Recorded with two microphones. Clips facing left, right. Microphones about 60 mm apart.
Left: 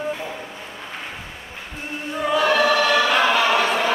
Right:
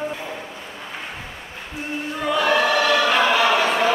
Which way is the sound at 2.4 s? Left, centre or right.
Centre.